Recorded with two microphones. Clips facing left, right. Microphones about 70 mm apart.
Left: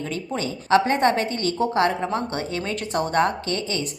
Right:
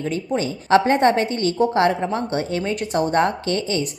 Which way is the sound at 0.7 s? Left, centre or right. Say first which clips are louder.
Right 3 dB; right.